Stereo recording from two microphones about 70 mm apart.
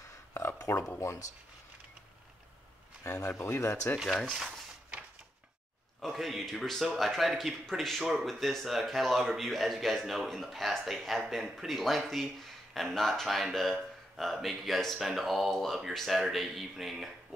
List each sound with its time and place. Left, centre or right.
0.3 s a sound: left
3.0 s speech: left
4.0 s a man's voice: centre
5.9 s a man's voice: centre